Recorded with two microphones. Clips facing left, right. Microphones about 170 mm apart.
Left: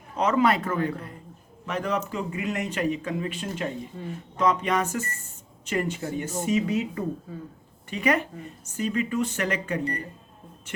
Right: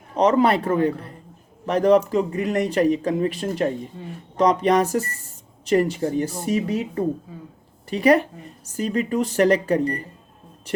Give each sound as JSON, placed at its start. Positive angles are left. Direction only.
{"t": 0.2, "sound": "speech", "side_deg": -35}